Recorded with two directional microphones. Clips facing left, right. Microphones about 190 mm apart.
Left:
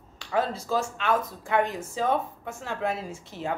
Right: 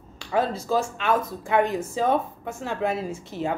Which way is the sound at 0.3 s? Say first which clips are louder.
Right 3 dB; 10° right (ahead or behind).